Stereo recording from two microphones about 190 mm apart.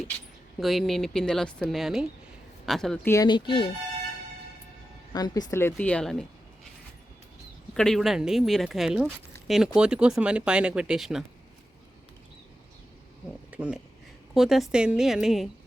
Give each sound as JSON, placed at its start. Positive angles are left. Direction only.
{"t": 0.6, "sound": "speech", "side_deg": 0}
{"t": 5.1, "sound": "speech", "side_deg": 20}
{"t": 7.7, "sound": "speech", "side_deg": 0}
{"t": 13.5, "sound": "speech", "side_deg": -5}